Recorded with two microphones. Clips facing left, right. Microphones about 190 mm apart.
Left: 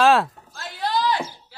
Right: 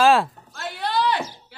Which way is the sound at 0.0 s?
Centre (ahead or behind).